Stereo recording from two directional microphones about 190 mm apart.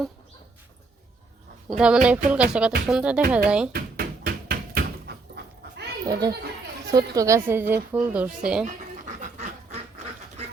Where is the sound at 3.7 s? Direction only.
55° right (ahead or behind).